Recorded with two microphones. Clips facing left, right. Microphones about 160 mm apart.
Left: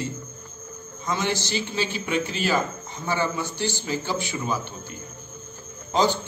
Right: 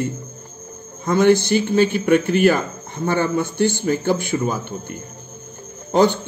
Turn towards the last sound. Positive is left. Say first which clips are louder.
# right 6 dB
turn(degrees=-60)  # may be behind; listen again after turning